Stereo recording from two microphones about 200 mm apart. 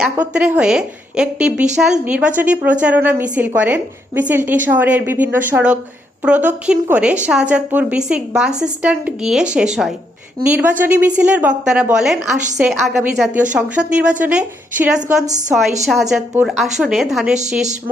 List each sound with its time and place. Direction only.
0.0 s a woman's voice: 5° right (ahead or behind)
15.0 s a woman's voice: 40° right (ahead or behind)
15.9 s a woman's voice: centre (ahead or behind)